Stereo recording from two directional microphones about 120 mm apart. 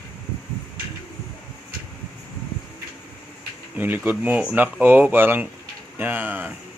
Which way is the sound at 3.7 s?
15° right (ahead or behind).